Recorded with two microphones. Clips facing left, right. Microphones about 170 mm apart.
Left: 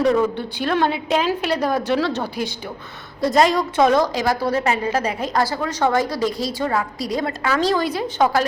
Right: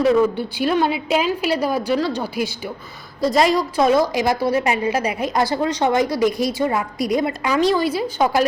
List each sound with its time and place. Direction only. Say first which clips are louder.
0.0 s a woman's voice: right 2 dB; 5° right (ahead or behind)